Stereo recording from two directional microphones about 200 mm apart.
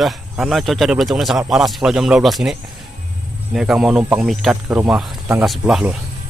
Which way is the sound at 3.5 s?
5° right (ahead or behind).